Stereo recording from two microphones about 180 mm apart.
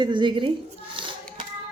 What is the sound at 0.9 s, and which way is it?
Hands, 30° right (ahead or behind).